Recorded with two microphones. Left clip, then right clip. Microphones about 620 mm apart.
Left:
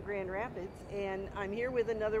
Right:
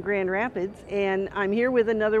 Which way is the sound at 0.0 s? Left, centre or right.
Right.